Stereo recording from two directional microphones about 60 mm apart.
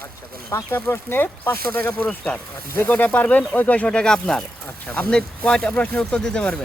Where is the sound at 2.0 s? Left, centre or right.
Left.